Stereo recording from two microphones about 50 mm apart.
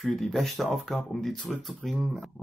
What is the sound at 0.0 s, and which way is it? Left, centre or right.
Speech, centre.